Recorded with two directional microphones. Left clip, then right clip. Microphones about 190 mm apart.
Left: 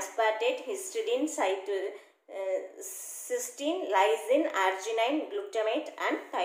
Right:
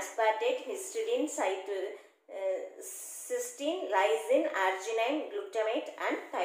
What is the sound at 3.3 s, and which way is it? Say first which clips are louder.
A woman's voice: left 2 dB; 25° left (ahead or behind).